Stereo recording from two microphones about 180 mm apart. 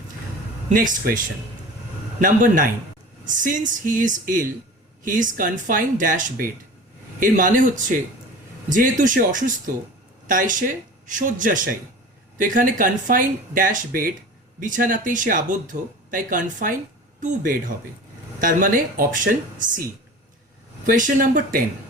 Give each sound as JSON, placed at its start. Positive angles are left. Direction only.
{"t": 0.7, "sound": "speech", "side_deg": -50}
{"t": 2.2, "sound": "speech", "side_deg": -50}
{"t": 20.8, "sound": "speech", "side_deg": -45}